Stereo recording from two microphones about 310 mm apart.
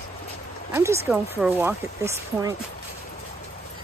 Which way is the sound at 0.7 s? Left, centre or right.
Centre.